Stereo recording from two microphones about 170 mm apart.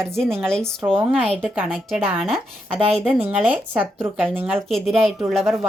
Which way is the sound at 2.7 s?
35° right (ahead or behind).